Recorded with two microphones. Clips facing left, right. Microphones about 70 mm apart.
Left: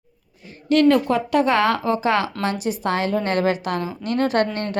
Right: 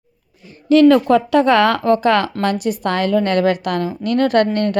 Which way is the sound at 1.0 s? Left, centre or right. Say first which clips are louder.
Right 6 dB; right.